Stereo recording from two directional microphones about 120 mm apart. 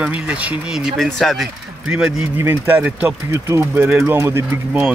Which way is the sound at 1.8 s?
10° right (ahead or behind).